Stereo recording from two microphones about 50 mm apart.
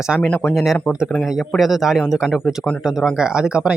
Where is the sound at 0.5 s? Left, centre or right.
Centre.